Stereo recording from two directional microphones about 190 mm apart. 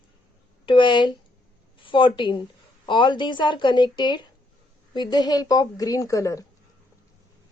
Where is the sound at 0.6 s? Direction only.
25° left (ahead or behind).